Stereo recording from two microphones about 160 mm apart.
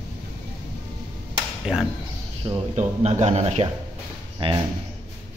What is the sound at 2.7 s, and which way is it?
Speech, 45° right (ahead or behind).